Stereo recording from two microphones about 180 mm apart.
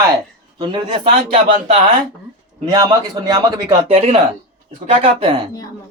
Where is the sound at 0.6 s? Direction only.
25° right (ahead or behind).